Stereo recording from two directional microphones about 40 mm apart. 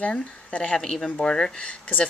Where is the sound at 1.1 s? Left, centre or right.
Left.